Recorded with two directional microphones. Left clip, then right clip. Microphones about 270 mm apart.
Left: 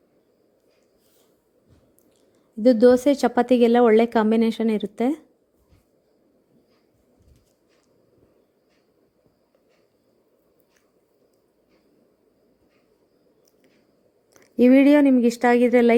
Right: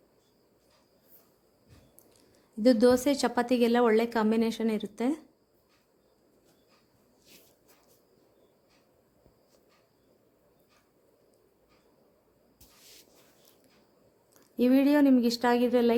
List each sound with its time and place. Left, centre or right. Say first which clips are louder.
2.6 s a woman's voice: left 7 dB; centre
14.3 s a woman's voice: left 9 dB; centre